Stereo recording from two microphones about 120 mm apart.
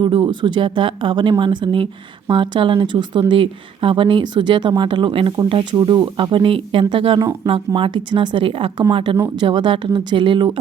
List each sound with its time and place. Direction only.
0.0 s speech: 40° right (ahead or behind)